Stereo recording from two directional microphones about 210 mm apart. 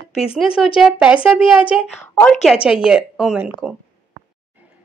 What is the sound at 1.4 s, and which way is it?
Speech, 25° left (ahead or behind).